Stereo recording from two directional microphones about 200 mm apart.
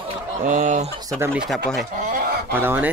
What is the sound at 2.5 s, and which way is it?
Speech, 10° right (ahead or behind).